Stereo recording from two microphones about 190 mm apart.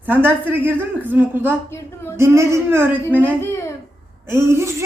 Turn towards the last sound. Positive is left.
turn(degrees=-15)  # may be behind; listen again after turning